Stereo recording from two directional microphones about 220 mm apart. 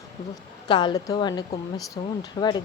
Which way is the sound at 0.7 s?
20° left (ahead or behind).